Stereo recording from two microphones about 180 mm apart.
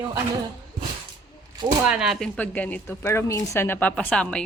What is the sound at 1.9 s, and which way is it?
A woman's voice, centre (ahead or behind).